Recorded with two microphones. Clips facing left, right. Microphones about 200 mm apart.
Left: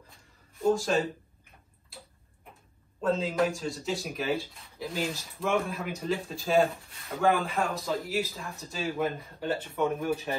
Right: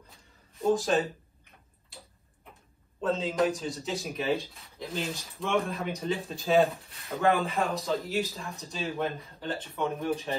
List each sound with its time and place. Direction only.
0.6 s a man's voice: centre (ahead or behind)
3.0 s a man's voice: centre (ahead or behind)